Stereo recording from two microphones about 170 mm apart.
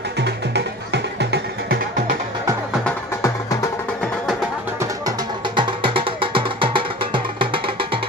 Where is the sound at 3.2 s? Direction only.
20° left (ahead or behind).